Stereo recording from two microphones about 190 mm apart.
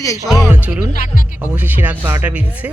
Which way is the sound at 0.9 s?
45° left (ahead or behind).